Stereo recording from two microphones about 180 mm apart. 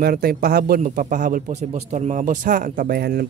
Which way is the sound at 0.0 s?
60° right (ahead or behind).